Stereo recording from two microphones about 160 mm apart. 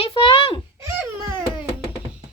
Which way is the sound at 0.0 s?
35° left (ahead or behind).